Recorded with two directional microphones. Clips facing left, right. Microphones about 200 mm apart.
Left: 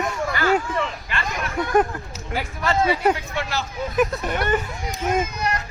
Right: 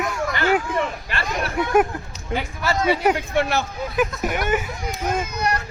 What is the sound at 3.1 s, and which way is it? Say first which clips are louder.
Speech: right 6 dB; 55° right (ahead or behind).